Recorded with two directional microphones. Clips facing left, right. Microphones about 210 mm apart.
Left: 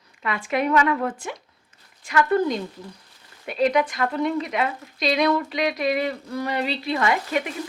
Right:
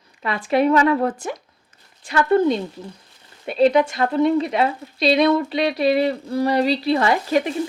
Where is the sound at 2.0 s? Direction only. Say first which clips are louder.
Right 4 dB; 30° right (ahead or behind).